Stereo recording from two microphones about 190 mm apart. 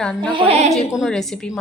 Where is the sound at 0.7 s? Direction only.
Centre (ahead or behind).